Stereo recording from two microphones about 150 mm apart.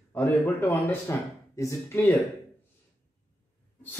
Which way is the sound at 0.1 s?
15° left (ahead or behind).